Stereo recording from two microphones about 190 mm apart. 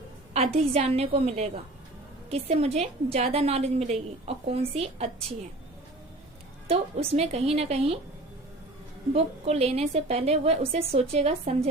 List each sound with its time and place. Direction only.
0.3 s a woman's voice: 35° right (ahead or behind)
6.7 s a woman's voice: 30° right (ahead or behind)
9.1 s a woman's voice: 35° right (ahead or behind)